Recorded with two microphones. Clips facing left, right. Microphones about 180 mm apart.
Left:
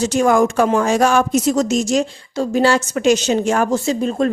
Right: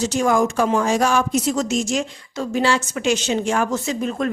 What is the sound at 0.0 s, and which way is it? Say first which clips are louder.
Speech: left 4 dB; 60° left (ahead or behind).